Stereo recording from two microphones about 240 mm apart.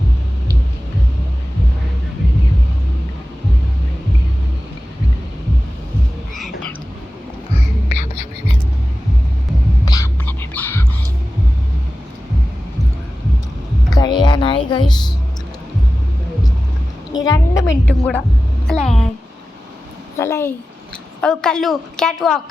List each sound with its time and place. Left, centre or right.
7.9 s whispering: left
9.8 s whispering: centre
13.9 s music: centre
17.2 s a sound: centre
18.7 s music: centre
20.1 s a sound: centre
21.2 s a woman's voice: centre